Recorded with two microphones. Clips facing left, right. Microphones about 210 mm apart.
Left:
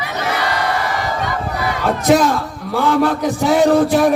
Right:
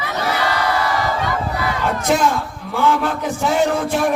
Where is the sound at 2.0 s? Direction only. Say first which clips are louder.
Left 5 dB; 35° left (ahead or behind).